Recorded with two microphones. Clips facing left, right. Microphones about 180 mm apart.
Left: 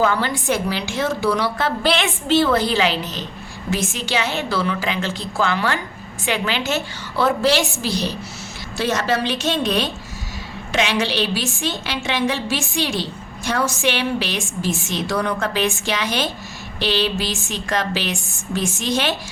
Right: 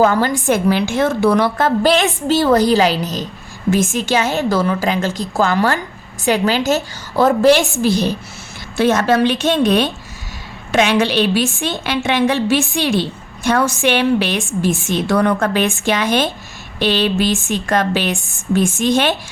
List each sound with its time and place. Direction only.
0.0 s a woman's voice: 45° right (ahead or behind)